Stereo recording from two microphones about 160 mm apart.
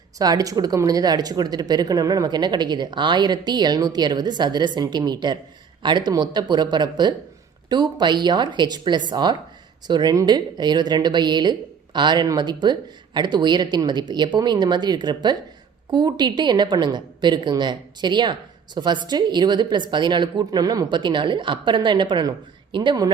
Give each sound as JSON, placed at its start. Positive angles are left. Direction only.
{"t": 0.2, "sound": "speech", "side_deg": -25}